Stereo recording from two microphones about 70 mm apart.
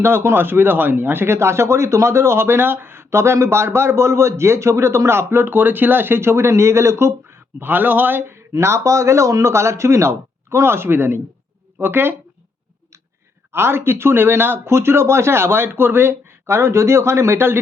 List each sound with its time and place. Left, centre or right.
0.0 s speech: right
13.5 s speech: right